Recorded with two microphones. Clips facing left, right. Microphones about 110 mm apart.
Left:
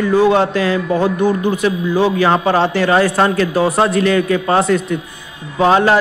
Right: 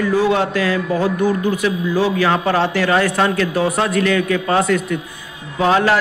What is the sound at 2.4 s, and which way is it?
A man's voice, 25° left (ahead or behind).